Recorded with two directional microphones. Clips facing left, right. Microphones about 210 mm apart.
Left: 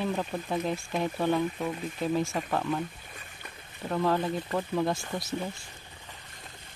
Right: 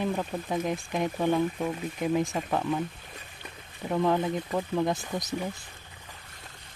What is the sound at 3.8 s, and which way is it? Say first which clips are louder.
Speech: right 2 dB; 15° right (ahead or behind).